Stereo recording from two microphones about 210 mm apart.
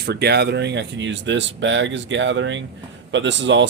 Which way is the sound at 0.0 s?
50° right (ahead or behind).